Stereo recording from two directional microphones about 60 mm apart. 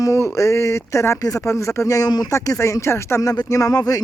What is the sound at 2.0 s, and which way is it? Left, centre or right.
Speech, left.